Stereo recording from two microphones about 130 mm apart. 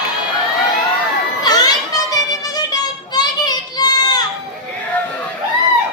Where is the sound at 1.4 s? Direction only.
30° left (ahead or behind).